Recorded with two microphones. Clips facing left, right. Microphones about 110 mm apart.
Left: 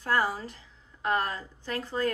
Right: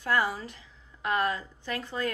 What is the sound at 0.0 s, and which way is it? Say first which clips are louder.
A woman's voice: even; 35° left (ahead or behind).